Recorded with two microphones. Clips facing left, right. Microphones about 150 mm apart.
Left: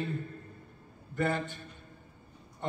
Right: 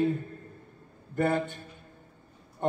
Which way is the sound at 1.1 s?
50° right (ahead or behind).